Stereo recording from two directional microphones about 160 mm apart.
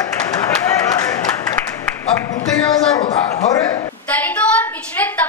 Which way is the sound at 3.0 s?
20° left (ahead or behind).